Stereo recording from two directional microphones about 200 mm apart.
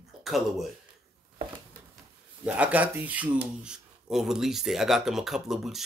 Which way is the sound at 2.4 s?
5° right (ahead or behind).